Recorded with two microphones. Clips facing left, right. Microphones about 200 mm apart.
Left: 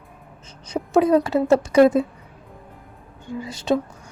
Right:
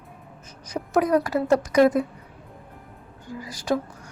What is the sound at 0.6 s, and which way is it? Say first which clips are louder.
A woman's voice: left 5 dB; 25° left (ahead or behind).